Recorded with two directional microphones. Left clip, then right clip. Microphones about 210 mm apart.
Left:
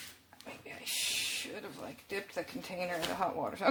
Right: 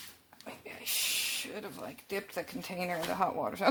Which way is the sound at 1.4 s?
40° right (ahead or behind).